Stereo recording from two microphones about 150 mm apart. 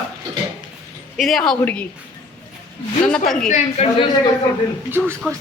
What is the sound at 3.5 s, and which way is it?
Speech, 50° left (ahead or behind).